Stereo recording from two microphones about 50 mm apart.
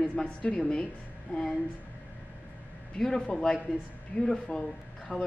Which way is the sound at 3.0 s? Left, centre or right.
Centre.